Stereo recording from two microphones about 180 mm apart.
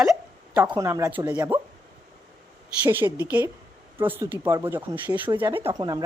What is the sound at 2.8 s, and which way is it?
Speech, 10° right (ahead or behind).